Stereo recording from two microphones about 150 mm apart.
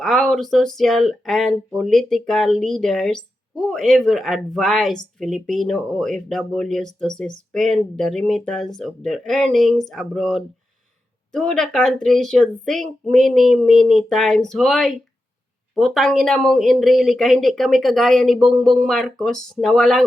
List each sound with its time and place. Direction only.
0.0 s speech: centre (ahead or behind)